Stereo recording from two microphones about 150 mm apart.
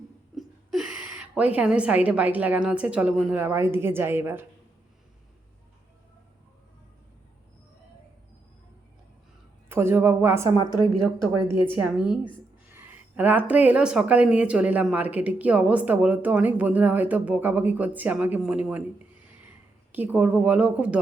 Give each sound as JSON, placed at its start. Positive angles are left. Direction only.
{"t": 0.3, "sound": "a woman's voice", "side_deg": 0}
{"t": 9.6, "sound": "speech", "side_deg": -15}
{"t": 19.9, "sound": "speech", "side_deg": -10}